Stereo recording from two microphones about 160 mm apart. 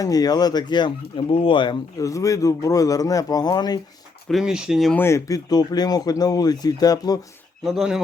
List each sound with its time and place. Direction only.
0.0 s speech: 25° left (ahead or behind)
4.3 s speech: 5° right (ahead or behind)
4.9 s speech: 15° left (ahead or behind)
7.6 s speech: centre (ahead or behind)